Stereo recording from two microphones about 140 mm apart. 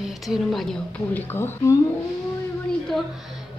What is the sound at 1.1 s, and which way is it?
Speech, 15° left (ahead or behind).